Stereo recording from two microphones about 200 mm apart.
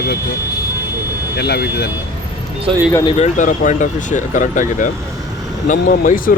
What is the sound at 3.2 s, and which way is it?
Speech, 35° left (ahead or behind).